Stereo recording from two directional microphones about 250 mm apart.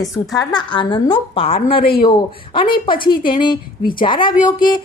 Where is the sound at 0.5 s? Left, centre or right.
Centre.